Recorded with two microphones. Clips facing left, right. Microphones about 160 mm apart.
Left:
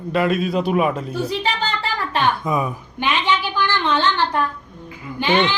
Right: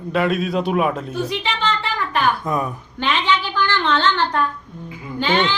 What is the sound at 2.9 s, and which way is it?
A child's voice, 10° left (ahead or behind).